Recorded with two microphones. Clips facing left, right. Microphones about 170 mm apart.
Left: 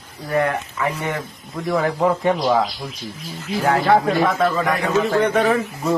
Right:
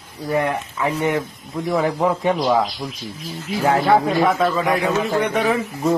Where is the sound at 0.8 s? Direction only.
20° right (ahead or behind).